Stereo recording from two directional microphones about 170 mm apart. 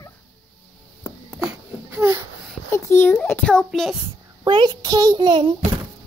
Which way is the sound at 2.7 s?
15° left (ahead or behind).